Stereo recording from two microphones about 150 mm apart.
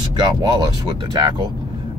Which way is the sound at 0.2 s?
30° right (ahead or behind).